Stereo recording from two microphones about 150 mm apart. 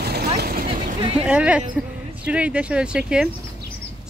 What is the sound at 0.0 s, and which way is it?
Vehicle, 90° right.